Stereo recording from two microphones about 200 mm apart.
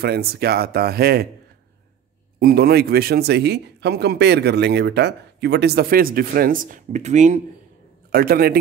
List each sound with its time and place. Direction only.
0.0 s speech: 50° right (ahead or behind)
2.3 s speech: 50° right (ahead or behind)
8.1 s speech: 50° right (ahead or behind)